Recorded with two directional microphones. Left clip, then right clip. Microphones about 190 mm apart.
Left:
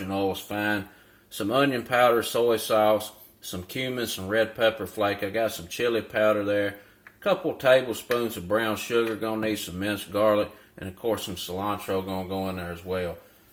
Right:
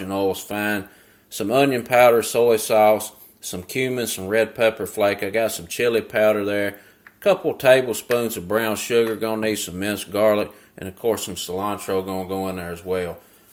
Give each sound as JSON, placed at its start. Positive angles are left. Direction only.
{"t": 0.1, "sound": "speech", "side_deg": -25}